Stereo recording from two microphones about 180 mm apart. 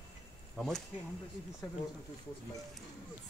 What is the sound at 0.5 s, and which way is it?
Speech, centre (ahead or behind).